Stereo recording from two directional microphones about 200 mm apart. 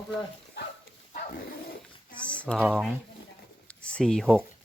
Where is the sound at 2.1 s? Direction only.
5° left (ahead or behind).